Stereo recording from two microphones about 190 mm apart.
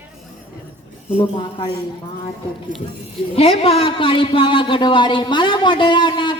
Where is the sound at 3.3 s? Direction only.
30° left (ahead or behind).